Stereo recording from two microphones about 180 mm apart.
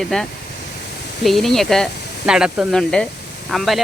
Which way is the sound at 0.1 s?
5° left (ahead or behind).